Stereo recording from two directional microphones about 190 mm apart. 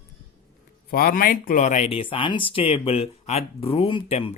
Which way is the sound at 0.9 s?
50° left (ahead or behind).